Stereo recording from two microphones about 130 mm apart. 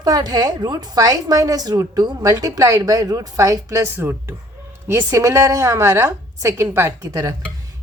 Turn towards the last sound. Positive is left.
turn(degrees=-25)  # may be behind; listen again after turning